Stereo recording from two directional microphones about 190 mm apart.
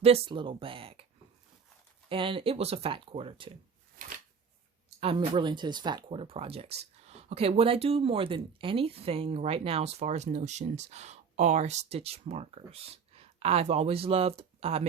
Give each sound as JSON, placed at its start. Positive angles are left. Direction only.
{"t": 0.0, "sound": "speech", "side_deg": -30}
{"t": 2.0, "sound": "speech", "side_deg": -25}
{"t": 4.9, "sound": "speech", "side_deg": -30}